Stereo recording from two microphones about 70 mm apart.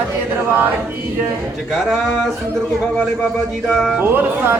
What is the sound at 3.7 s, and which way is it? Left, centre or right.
Speech, centre.